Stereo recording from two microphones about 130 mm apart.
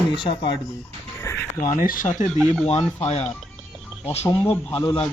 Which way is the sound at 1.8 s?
90° left.